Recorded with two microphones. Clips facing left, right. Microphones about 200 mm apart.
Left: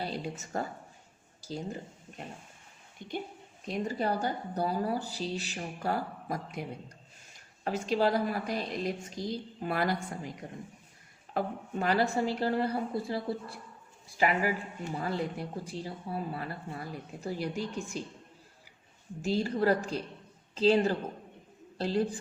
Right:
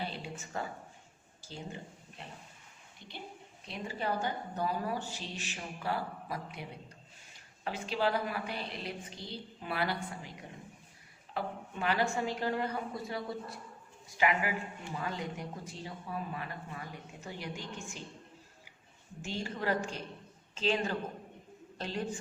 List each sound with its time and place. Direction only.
0.0 s a woman's voice: 40° left (ahead or behind)
11.3 s speech: 40° left (ahead or behind)
19.2 s speech: 35° left (ahead or behind)